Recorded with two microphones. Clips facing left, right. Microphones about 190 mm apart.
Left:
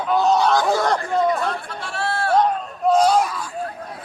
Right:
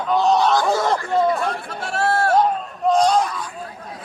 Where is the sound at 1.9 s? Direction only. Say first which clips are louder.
Right 5 dB; 45° right (ahead or behind).